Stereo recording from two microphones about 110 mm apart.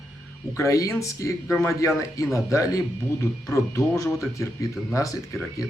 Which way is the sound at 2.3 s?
30° left (ahead or behind).